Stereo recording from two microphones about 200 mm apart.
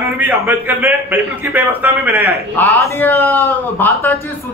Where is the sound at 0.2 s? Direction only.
10° right (ahead or behind).